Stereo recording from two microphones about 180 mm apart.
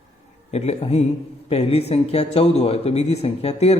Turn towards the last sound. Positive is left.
turn(degrees=35)  # may be behind; listen again after turning